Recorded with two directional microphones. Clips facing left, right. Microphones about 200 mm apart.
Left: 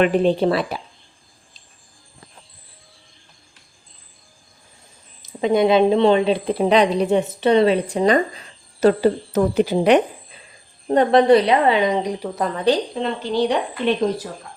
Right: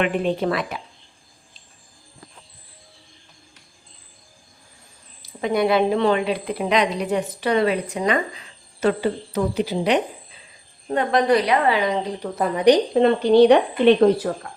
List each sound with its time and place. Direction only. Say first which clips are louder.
0.0 s speech: left 5 dB; 35° left (ahead or behind)
5.2 s a woman's voice: left 4 dB; 20° left (ahead or behind); by 10.0 s 55° left (ahead or behind)
10.8 s a woman's voice: left 5 dB; 30° left (ahead or behind); by 12.3 s 15° left (ahead or behind)
12.4 s speech: right 4 dB; 10° right (ahead or behind)
12.9 s speech: right 8 dB; 60° right (ahead or behind)